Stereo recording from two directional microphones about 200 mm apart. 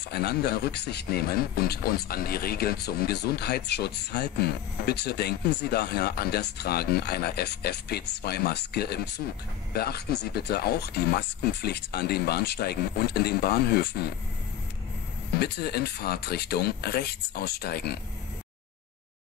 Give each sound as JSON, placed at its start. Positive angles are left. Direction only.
{"t": 0.1, "sound": "speech", "side_deg": 55}
{"t": 15.3, "sound": "speech", "side_deg": 55}